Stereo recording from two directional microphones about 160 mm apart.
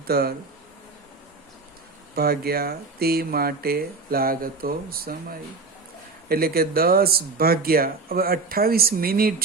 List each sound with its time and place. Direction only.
0.1 s speech: 70° right (ahead or behind)
2.1 s speech: 75° right (ahead or behind)